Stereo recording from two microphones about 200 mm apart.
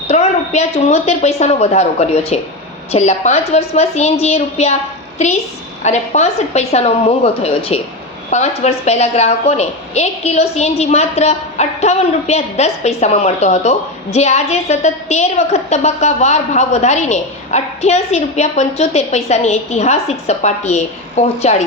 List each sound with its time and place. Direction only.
0.1 s a woman's voice: 35° left (ahead or behind)